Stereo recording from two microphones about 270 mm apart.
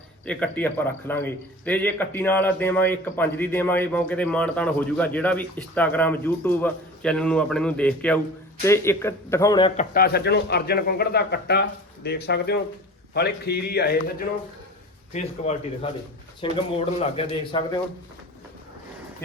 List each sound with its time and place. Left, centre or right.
0.3 s a man's voice: centre
9.9 s a man's voice: left
15.1 s a man's voice: left